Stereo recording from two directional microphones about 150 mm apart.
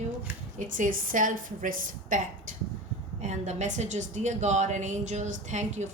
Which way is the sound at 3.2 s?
50° right (ahead or behind).